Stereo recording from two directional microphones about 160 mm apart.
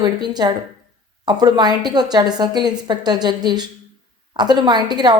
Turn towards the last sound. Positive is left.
turn(degrees=-25)  # may be behind; listen again after turning